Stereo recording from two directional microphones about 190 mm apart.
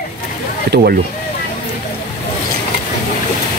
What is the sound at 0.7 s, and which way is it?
Speech, 55° right (ahead or behind).